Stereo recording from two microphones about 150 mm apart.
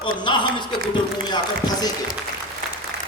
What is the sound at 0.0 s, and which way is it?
A man's voice, 30° left (ahead or behind).